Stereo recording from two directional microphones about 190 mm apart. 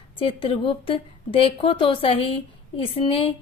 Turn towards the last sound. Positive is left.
turn(degrees=30)  # may be behind; listen again after turning